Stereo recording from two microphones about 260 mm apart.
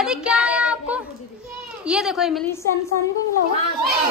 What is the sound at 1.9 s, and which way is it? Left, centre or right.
Speech, centre.